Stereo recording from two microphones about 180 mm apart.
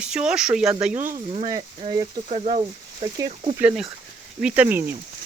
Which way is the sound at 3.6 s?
5° right (ahead or behind).